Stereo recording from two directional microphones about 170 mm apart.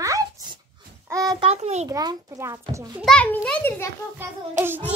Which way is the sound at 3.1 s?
5° left (ahead or behind).